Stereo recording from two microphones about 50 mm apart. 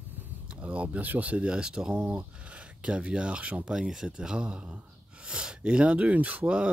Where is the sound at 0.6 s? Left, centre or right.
Right.